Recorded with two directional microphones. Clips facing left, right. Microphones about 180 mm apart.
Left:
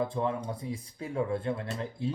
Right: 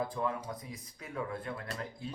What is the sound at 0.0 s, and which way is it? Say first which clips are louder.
Speech: left 4 dB; 25° left (ahead or behind).